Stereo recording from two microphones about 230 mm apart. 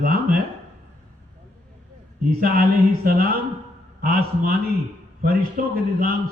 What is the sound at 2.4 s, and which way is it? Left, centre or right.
A man's voice, right.